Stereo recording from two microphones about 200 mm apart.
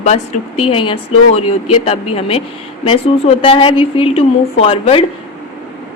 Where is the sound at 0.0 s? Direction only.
30° left (ahead or behind).